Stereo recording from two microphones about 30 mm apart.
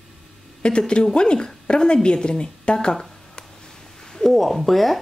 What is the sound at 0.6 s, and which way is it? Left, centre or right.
A woman's voice, left.